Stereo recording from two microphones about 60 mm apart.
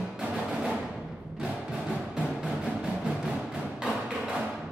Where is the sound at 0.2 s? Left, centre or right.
Centre.